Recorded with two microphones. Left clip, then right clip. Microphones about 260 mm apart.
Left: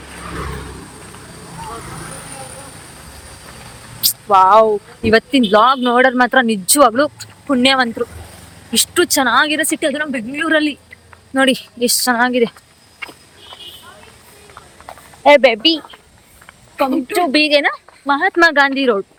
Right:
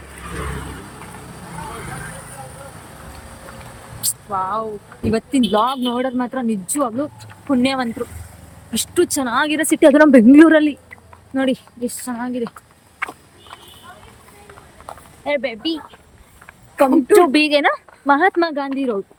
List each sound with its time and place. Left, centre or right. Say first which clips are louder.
4.3 s speech: left 14 dB; left
5.5 s speech: left 8 dB; centre
12.0 s speech: left 15 dB; centre
15.2 s speech: left 13 dB; centre
16.7 s speech: right 5 dB; centre